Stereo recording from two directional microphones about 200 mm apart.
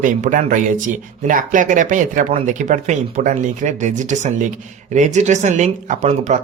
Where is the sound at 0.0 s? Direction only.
40° right (ahead or behind).